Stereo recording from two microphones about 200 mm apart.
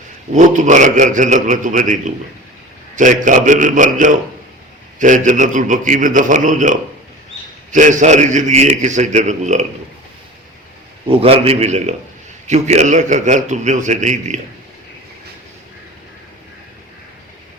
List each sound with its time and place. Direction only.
0.3 s a man's voice: 40° right (ahead or behind)
11.1 s a man's voice: 30° right (ahead or behind)